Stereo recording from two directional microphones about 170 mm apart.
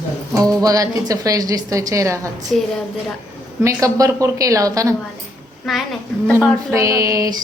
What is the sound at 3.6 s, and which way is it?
A woman's voice, 20° right (ahead or behind).